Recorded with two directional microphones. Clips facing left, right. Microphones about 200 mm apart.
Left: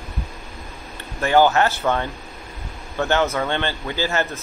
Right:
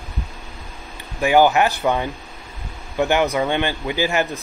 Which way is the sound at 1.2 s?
15° right (ahead or behind).